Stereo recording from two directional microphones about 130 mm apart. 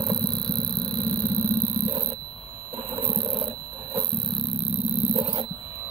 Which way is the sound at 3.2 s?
45° right (ahead or behind).